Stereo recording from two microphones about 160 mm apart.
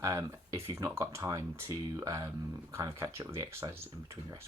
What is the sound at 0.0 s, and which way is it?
Speech, 20° right (ahead or behind).